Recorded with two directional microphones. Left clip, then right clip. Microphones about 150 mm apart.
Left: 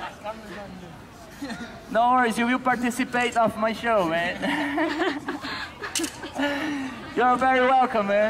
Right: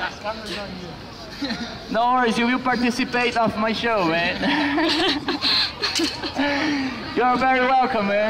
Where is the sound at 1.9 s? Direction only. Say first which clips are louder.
Right 1 dB; 5° left (ahead or behind).